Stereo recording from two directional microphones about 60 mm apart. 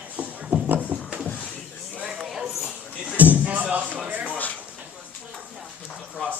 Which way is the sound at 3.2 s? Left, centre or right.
Right.